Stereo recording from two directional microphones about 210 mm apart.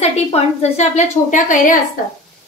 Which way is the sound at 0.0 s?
30° left (ahead or behind).